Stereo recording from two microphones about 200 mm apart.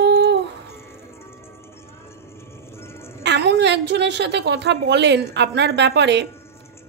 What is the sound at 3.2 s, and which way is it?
A woman's voice, 60° right (ahead or behind).